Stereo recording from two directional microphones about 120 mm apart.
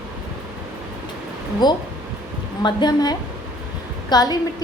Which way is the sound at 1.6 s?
35° left (ahead or behind).